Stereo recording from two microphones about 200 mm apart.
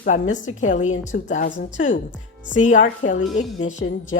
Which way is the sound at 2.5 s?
40° left (ahead or behind).